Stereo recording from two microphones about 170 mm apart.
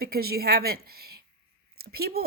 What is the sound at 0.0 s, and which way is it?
Speech, 65° right (ahead or behind).